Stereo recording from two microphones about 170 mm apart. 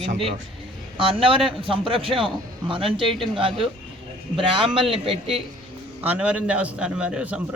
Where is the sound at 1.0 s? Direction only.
30° right (ahead or behind).